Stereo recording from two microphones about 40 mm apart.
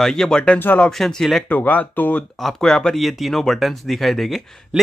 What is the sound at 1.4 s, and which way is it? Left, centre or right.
Speech, left.